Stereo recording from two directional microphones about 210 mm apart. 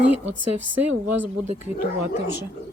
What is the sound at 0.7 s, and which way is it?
Speech, 10° right (ahead or behind).